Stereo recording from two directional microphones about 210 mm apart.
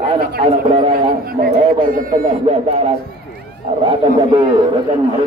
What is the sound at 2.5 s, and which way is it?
Speech, 30° right (ahead or behind).